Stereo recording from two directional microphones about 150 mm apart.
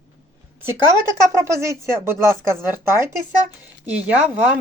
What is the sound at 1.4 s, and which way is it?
Speech, 20° right (ahead or behind).